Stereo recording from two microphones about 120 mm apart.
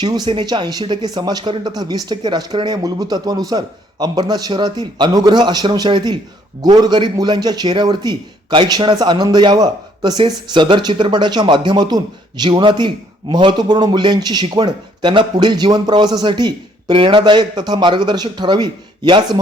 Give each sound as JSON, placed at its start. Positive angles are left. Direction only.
{"t": 0.0, "sound": "a man's voice", "side_deg": -35}